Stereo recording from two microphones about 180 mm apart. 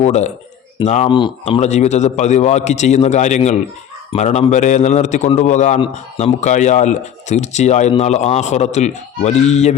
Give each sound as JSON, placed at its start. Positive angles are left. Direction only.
{"t": 0.0, "sound": "a man's voice", "side_deg": 40}